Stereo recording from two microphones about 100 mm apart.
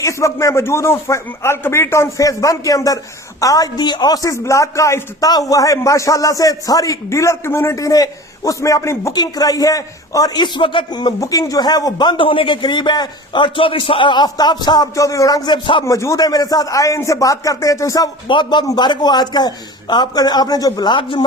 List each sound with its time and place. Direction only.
0.0 s a man's voice: 30° left (ahead or behind); by 11.1 s 50° left (ahead or behind)
11.2 s speech: 35° left (ahead or behind)
14.9 s a man's voice: 35° left (ahead or behind)
15.4 s speech: 50° left (ahead or behind)
15.8 s a man's voice: 30° left (ahead or behind)
18.3 s a man's voice: 55° left (ahead or behind); by 20.9 s 40° left (ahead or behind)
20.9 s a man's voice: 55° left (ahead or behind)